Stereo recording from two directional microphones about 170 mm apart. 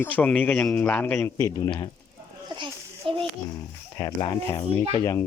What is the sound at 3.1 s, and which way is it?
Speech, 30° right (ahead or behind).